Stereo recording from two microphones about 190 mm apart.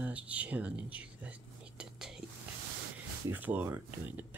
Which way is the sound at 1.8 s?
5° right (ahead or behind).